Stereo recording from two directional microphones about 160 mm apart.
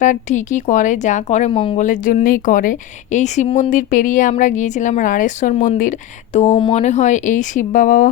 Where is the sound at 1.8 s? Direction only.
55° left (ahead or behind).